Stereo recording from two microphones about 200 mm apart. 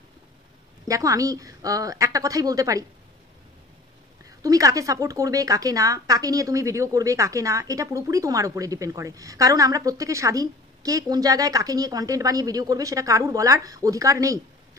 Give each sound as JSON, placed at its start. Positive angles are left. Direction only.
{"t": 0.8, "sound": "a woman's voice", "side_deg": -15}
{"t": 4.4, "sound": "a woman's voice", "side_deg": -15}